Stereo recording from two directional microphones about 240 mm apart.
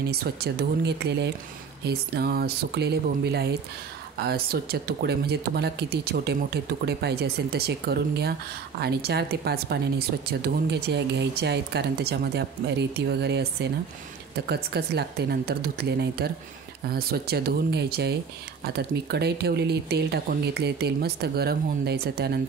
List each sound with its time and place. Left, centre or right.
0.1 s a woman's voice: right